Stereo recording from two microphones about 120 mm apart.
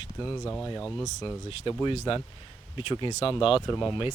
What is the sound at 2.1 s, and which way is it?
Speech, 45° left (ahead or behind).